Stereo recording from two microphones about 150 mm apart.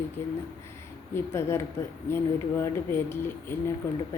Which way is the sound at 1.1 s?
15° left (ahead or behind).